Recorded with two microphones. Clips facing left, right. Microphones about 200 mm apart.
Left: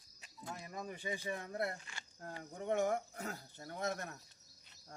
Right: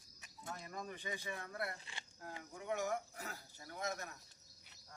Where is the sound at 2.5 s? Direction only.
50° left (ahead or behind).